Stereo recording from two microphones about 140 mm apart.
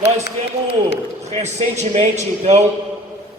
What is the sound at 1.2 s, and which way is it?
A man's voice, 55° right (ahead or behind).